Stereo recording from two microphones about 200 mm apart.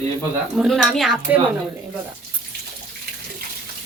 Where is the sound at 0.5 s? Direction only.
Centre (ahead or behind).